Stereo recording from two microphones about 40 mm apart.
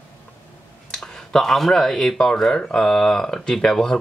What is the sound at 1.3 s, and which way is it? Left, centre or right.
Speech, centre.